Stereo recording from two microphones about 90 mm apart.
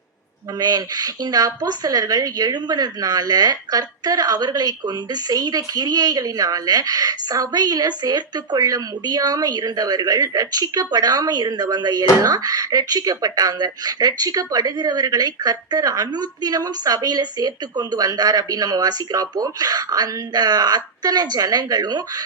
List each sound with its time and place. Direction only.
0.6 s a woman's voice: 45° right (ahead or behind)